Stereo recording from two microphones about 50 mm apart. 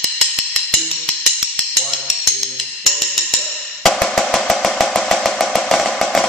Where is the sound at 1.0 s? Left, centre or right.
Centre.